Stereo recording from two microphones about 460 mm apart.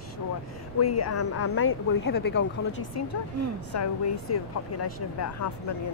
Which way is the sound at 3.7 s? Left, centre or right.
Left.